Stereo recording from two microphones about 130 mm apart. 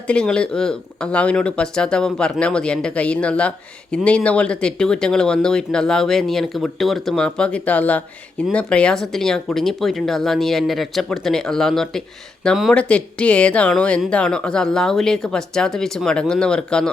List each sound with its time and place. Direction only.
0.1 s speech: 5° left (ahead or behind)